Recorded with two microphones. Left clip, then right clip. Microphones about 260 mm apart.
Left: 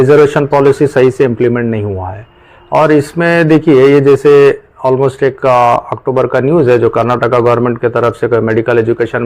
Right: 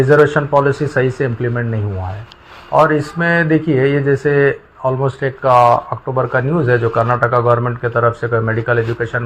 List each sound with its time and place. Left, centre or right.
0.2 s a man's voice: left